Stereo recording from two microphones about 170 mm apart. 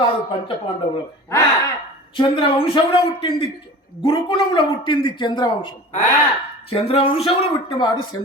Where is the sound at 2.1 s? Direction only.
30° left (ahead or behind).